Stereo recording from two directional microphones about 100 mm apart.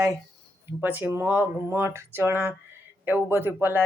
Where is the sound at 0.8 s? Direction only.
20° right (ahead or behind).